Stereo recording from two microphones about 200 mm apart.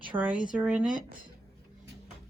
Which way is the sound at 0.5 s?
5° right (ahead or behind).